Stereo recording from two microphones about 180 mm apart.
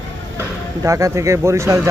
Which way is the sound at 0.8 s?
15° right (ahead or behind).